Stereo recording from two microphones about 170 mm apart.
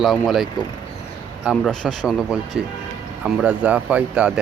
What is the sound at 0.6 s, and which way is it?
Speech, centre (ahead or behind).